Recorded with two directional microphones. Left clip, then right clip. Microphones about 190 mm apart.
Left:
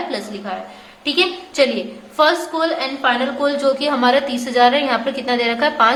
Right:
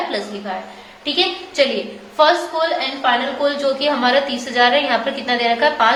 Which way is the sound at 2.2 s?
30° left (ahead or behind).